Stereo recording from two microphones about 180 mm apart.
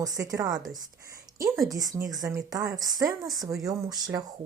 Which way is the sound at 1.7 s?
20° right (ahead or behind).